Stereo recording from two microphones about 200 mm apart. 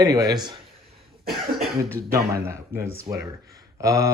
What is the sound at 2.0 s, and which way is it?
Speech, 15° right (ahead or behind).